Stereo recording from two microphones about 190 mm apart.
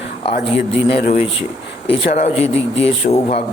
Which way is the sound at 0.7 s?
30° left (ahead or behind).